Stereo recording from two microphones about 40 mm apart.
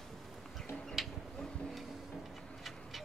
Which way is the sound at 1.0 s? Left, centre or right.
Centre.